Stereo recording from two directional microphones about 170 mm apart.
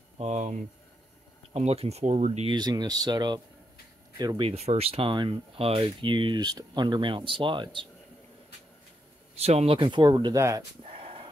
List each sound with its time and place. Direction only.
0.2 s speech: 45° right (ahead or behind)
2.5 s speech: 25° right (ahead or behind)
4.5 s speech: 35° right (ahead or behind)
9.4 s speech: 40° right (ahead or behind); by 10.6 s 20° right (ahead or behind)
10.8 s a sound: 35° right (ahead or behind)